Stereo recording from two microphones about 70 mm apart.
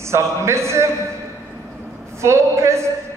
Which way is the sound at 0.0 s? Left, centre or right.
Right.